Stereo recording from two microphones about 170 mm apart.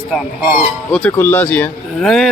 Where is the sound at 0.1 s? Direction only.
5° right (ahead or behind).